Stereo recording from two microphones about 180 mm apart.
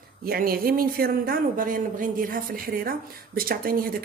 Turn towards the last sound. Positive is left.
turn(degrees=-55)  # may be behind; listen again after turning